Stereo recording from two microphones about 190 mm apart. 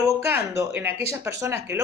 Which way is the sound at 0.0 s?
15° right (ahead or behind).